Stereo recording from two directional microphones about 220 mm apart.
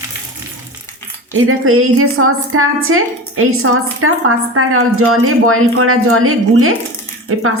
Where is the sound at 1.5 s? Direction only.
70° right (ahead or behind).